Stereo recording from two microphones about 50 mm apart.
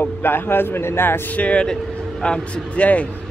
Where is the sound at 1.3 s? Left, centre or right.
Left.